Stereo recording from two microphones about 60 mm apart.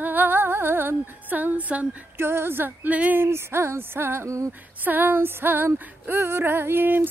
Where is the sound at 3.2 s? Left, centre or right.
Right.